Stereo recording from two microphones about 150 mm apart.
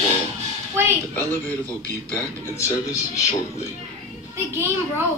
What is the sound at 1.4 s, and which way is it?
A man's voice, 10° left (ahead or behind).